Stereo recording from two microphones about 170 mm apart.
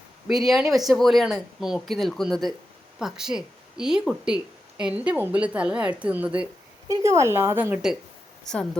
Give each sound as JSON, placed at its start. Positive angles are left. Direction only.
{"t": 0.3, "sound": "a woman's voice", "side_deg": 0}
{"t": 6.8, "sound": "a woman's voice", "side_deg": -20}
{"t": 8.4, "sound": "speech", "side_deg": 5}